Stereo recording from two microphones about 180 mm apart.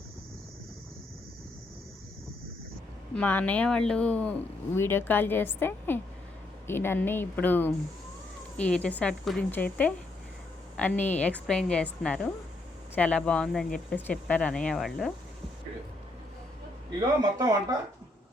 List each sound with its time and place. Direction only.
3.2 s speech: 10° left (ahead or behind)
17.3 s speech: 20° right (ahead or behind)